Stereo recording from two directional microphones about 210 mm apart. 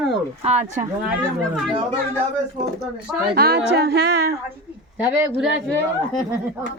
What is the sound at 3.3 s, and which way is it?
Speech, 50° right (ahead or behind).